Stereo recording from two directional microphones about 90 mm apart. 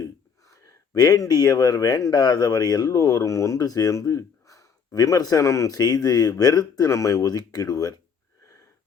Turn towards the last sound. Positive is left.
turn(degrees=40)  # may be behind; listen again after turning